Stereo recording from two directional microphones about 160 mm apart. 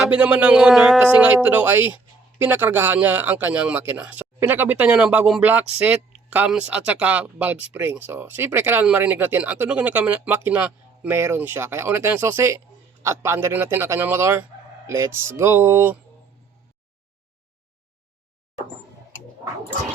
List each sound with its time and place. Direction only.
0.1 s speech: 10° right (ahead or behind)